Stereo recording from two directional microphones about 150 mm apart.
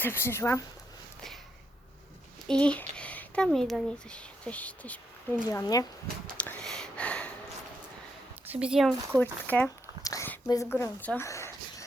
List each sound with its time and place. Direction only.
0.0 s speech: 15° left (ahead or behind)
2.5 s speech: 5° left (ahead or behind)
5.5 s speech: 25° left (ahead or behind)
6.3 s a sound: 10° left (ahead or behind)
8.4 s speech: 5° right (ahead or behind)
9.2 s speech: 10° left (ahead or behind)
10.0 s a sound: 25° left (ahead or behind)
10.2 s a woman's voice: 20° left (ahead or behind)
11.3 s a sound: 20° left (ahead or behind)